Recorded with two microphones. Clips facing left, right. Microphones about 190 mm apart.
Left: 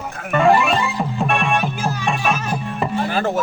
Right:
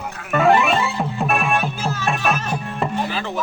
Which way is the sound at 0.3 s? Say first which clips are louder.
Left 1 dB; centre (ahead or behind).